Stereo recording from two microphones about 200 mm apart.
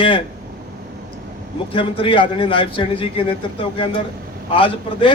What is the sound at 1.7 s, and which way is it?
A man's voice, 25° left (ahead or behind).